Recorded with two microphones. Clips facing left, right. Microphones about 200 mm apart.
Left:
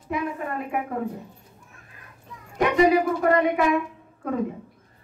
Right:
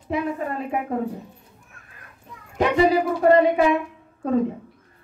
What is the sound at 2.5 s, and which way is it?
A woman's voice, 30° right (ahead or behind).